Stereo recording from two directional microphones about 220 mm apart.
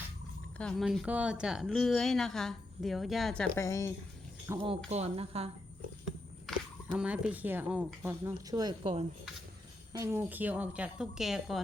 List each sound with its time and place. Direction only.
0.6 s speech: centre (ahead or behind)
4.4 s speech: 25° right (ahead or behind)
7.0 s speech: 5° right (ahead or behind); by 9.0 s 25° right (ahead or behind)
9.9 s speech: 10° right (ahead or behind)